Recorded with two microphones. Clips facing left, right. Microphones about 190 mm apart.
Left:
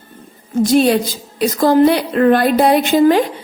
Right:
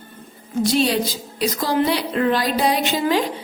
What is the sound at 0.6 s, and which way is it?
A woman's voice, 50° left (ahead or behind).